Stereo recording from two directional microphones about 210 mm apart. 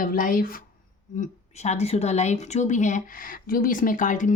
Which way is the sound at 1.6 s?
30° left (ahead or behind).